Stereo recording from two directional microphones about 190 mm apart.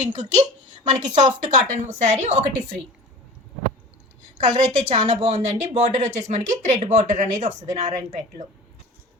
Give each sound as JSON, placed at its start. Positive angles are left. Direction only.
{"t": 0.0, "sound": "a woman's voice", "side_deg": -40}
{"t": 4.4, "sound": "a woman's voice", "side_deg": -35}